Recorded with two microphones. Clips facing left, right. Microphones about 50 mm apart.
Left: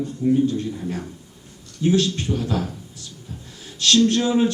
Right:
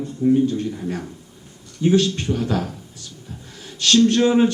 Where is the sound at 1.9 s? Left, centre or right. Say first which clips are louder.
Right 2 dB; right.